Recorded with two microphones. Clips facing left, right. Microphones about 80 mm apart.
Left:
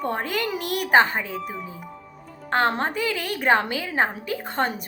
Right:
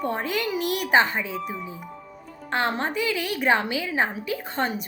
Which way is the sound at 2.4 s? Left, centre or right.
Left.